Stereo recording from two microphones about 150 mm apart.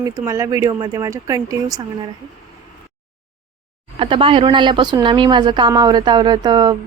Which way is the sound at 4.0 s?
35° right (ahead or behind).